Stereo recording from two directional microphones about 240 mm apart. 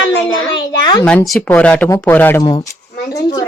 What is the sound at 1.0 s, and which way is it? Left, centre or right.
Speech, centre.